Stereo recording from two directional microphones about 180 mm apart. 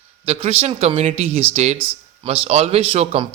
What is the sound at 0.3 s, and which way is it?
Speech, 35° right (ahead or behind).